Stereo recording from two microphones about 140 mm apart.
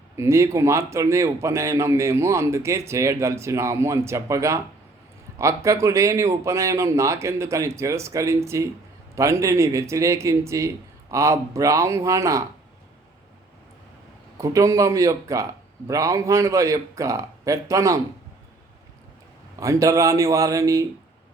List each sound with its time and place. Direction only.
0.2 s speech: 20° right (ahead or behind)
14.3 s speech: 20° right (ahead or behind)
19.5 s speech: 25° right (ahead or behind)